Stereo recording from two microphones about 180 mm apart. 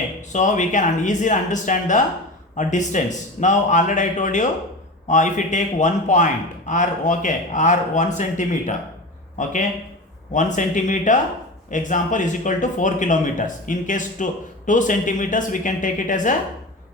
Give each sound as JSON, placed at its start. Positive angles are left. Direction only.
{"t": 0.3, "sound": "speech", "side_deg": 45}